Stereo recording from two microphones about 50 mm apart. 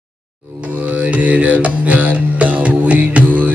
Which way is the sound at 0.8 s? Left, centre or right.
Right.